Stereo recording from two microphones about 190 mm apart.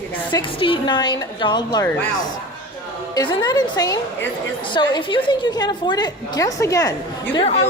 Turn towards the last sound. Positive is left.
turn(degrees=30)  # may be behind; listen again after turning